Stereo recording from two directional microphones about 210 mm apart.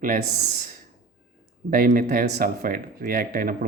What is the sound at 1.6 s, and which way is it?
Speech, 40° right (ahead or behind).